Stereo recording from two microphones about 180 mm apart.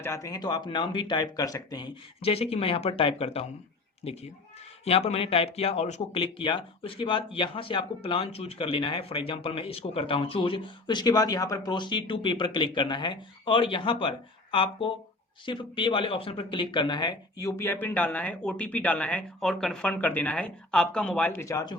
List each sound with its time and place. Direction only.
0.0 s speech: 15° left (ahead or behind)
2.2 s speech: 35° left (ahead or behind)